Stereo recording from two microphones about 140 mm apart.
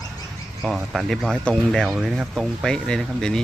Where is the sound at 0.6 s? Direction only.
Centre (ahead or behind).